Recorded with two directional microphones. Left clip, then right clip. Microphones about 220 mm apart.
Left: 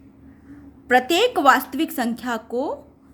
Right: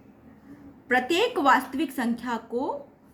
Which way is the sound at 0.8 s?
50° left (ahead or behind).